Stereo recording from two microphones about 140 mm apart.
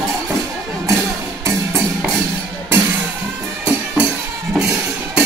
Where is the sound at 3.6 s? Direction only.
10° right (ahead or behind).